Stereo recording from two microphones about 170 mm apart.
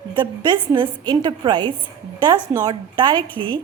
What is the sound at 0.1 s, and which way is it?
A woman's voice, 25° right (ahead or behind).